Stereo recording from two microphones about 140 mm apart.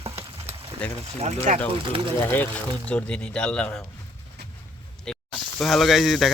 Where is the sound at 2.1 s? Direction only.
15° left (ahead or behind).